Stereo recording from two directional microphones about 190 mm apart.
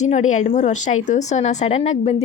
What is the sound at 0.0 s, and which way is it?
Speech, 40° left (ahead or behind).